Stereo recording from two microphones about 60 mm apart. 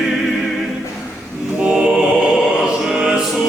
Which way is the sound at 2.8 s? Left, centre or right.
Centre.